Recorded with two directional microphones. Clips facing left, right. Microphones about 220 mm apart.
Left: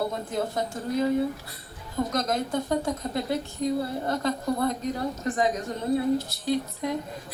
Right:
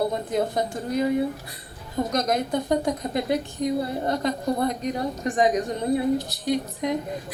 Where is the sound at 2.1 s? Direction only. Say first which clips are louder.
Right 4 dB; 20° right (ahead or behind).